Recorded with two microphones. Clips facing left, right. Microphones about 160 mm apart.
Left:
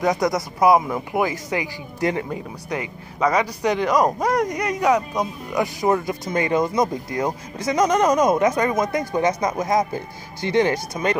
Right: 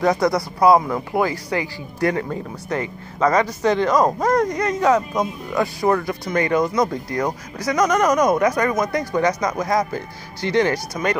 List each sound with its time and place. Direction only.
0.0 s speech: 20° left (ahead or behind)